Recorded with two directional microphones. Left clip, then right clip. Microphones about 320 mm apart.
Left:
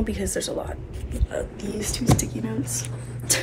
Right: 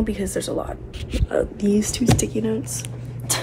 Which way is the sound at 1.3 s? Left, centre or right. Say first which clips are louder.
Right 9 dB; right.